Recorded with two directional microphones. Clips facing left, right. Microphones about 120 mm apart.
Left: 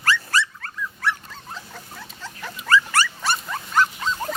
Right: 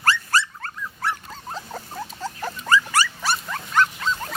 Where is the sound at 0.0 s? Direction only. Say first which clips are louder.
Right 1 dB; 35° right (ahead or behind).